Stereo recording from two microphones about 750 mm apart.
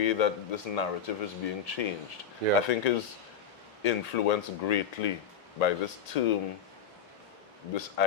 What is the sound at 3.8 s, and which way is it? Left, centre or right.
Speech, left.